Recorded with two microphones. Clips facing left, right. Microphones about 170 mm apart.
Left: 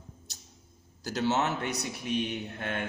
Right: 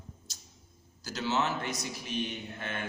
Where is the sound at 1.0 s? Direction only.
60° left (ahead or behind).